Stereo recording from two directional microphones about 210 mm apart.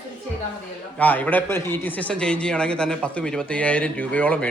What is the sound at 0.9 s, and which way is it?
Speech, 5° left (ahead or behind).